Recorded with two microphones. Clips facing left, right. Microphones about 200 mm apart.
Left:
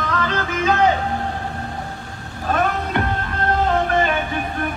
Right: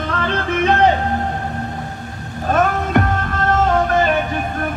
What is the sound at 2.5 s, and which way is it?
Music, 45° right (ahead or behind).